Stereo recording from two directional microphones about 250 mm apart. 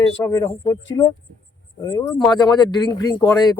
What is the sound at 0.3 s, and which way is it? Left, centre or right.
Speech, centre.